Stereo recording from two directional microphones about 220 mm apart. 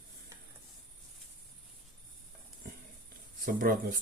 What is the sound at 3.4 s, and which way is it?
Speech, 40° right (ahead or behind).